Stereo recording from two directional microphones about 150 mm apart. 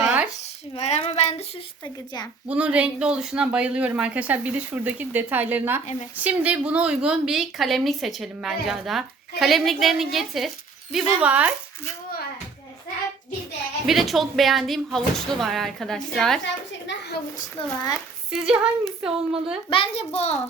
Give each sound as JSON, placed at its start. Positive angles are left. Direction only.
{"t": 0.0, "sound": "a sound", "side_deg": -5}
{"t": 0.8, "sound": "child singing", "side_deg": 45}
{"t": 2.5, "sound": "a woman's voice", "side_deg": -10}
{"t": 13.8, "sound": "a woman's voice", "side_deg": 0}
{"t": 17.6, "sound": "a child's voice", "side_deg": 40}
{"t": 18.3, "sound": "a woman's voice", "side_deg": -5}
{"t": 19.7, "sound": "child singing", "side_deg": 40}